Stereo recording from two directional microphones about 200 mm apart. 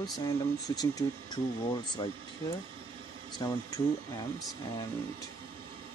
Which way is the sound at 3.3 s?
20° left (ahead or behind).